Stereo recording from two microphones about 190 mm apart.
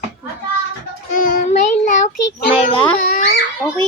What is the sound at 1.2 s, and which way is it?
Child singing, 45° left (ahead or behind).